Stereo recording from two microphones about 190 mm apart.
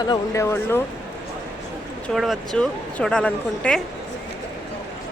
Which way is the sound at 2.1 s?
Centre (ahead or behind).